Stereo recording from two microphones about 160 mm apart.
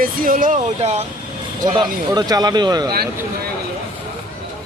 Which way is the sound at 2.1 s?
25° right (ahead or behind).